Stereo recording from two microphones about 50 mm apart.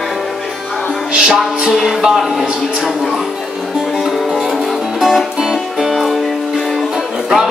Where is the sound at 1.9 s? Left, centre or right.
Centre.